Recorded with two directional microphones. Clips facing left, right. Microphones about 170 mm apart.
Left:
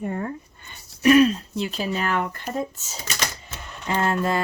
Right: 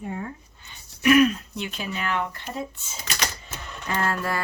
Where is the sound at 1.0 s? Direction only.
30° left (ahead or behind).